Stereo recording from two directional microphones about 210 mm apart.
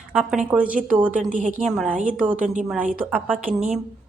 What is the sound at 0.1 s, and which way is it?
A woman's voice, 5° right (ahead or behind).